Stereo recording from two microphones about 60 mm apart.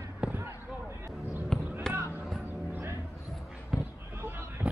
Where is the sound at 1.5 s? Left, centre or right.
Centre.